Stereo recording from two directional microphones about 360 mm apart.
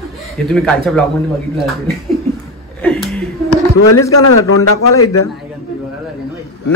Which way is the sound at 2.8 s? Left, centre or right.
Centre.